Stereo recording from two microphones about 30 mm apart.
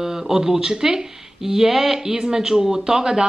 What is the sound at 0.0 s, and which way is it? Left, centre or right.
Speech, centre.